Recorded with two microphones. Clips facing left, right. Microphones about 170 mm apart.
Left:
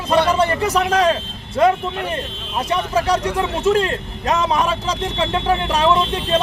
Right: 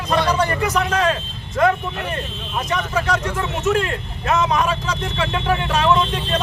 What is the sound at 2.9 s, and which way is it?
Speech, 35° left (ahead or behind).